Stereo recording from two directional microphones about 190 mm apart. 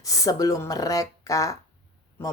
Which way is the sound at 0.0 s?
20° left (ahead or behind).